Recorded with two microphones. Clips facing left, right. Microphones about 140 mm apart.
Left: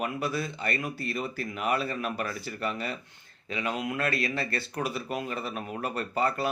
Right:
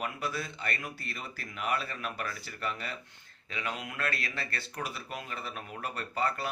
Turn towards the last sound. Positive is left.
turn(degrees=20)  # may be behind; listen again after turning